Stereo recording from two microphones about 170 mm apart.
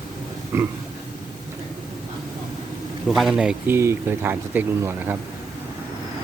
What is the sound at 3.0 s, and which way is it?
Speech, centre (ahead or behind).